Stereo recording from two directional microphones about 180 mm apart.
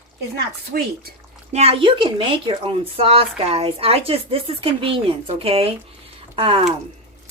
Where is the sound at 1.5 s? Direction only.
35° right (ahead or behind).